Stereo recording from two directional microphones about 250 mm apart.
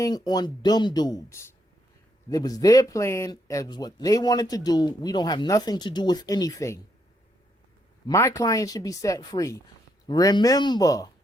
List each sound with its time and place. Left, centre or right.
0.0 s speech: centre
8.0 s speech: centre